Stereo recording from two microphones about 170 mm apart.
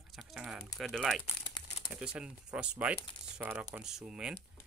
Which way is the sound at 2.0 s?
5° right (ahead or behind).